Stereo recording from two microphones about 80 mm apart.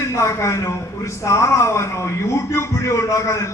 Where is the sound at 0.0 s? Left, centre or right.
Left.